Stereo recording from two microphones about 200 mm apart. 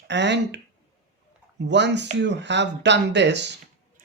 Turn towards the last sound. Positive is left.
turn(degrees=-60)  # may be behind; listen again after turning